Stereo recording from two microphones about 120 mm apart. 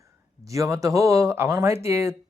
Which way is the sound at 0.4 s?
25° right (ahead or behind).